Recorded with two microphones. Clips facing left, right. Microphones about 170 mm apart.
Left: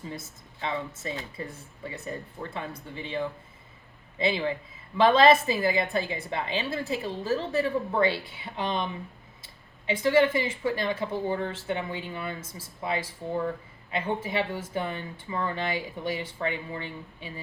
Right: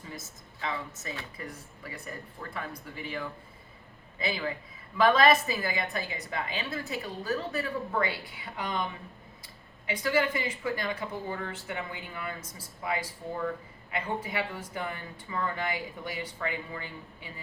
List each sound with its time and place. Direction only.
0.1 s speech: 30° left (ahead or behind)